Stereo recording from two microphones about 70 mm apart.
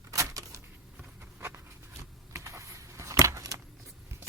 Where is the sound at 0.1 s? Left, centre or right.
Right.